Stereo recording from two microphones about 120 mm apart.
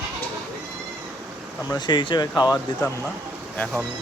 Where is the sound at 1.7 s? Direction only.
40° left (ahead or behind).